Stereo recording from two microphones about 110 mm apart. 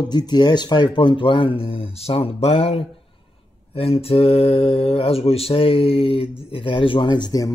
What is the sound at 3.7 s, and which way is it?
A man's voice, 60° left (ahead or behind).